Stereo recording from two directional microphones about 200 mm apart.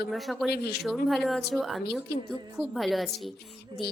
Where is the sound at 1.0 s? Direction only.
Centre (ahead or behind).